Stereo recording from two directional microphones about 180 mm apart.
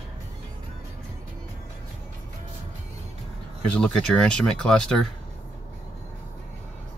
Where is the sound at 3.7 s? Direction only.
5° left (ahead or behind).